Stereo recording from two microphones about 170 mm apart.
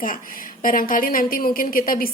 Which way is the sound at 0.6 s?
55° left (ahead or behind).